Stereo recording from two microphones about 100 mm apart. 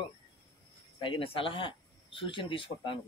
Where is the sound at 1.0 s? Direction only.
60° left (ahead or behind).